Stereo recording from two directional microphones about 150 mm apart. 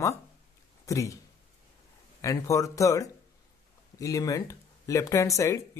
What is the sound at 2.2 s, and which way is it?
Speech, 20° left (ahead or behind).